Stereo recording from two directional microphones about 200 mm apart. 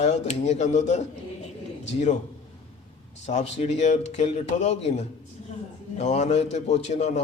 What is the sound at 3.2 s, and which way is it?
A man's voice, 35° left (ahead or behind).